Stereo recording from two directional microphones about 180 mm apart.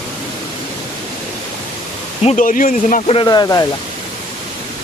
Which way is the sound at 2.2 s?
40° left (ahead or behind).